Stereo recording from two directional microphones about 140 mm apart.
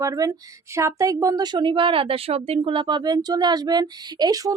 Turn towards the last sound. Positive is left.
turn(degrees=-25)  # may be behind; listen again after turning